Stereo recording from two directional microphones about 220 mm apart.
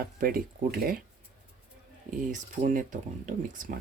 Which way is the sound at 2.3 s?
35° right (ahead or behind).